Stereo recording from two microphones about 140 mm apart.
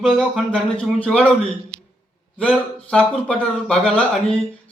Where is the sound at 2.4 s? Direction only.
5° left (ahead or behind).